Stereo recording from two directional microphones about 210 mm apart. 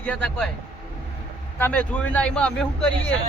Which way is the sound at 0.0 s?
5° left (ahead or behind).